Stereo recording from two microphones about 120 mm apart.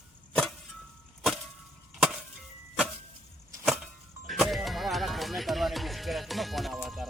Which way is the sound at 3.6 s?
Centre (ahead or behind).